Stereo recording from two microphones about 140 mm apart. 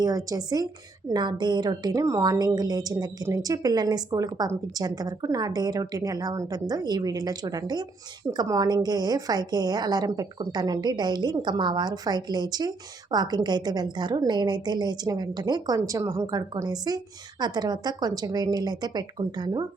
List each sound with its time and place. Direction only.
0.0 s a woman's voice: 25° right (ahead or behind)